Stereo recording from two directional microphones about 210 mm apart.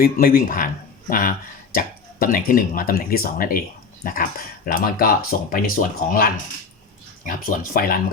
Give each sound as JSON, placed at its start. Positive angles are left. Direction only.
{"t": 0.0, "sound": "speech", "side_deg": 45}
{"t": 1.7, "sound": "speech", "side_deg": 45}